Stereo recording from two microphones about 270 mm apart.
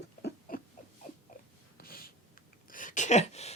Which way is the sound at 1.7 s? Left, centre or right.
Left.